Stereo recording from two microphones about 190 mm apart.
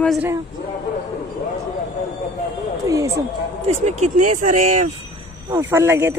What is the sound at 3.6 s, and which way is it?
Speech, 40° right (ahead or behind).